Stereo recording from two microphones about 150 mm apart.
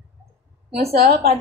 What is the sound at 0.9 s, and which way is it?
Speech, 90° right.